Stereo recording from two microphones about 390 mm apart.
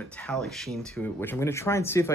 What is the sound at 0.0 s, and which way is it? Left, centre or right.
Speech, centre.